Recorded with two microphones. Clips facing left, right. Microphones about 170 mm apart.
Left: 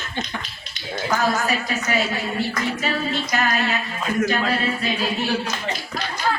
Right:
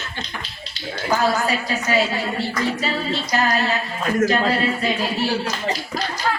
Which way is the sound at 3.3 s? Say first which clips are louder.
Right 3 dB; 35° right (ahead or behind).